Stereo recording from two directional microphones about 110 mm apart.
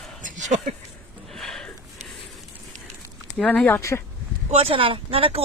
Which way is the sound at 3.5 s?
20° left (ahead or behind).